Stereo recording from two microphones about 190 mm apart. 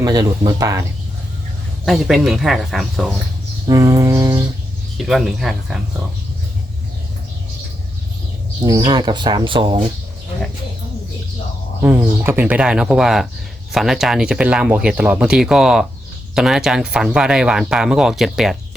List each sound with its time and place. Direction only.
0.0 s speech: 20° right (ahead or behind)
1.8 s speech: centre (ahead or behind)
3.7 s music: 15° right (ahead or behind)
5.0 s speech: centre (ahead or behind)
8.6 s speech: 20° right (ahead or behind)
11.8 s speech: 10° right (ahead or behind)